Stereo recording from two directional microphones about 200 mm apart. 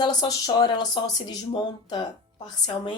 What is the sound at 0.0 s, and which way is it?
A woman's voice, 20° left (ahead or behind).